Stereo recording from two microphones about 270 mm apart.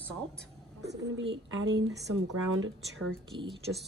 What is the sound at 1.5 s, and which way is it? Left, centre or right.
Speech, right.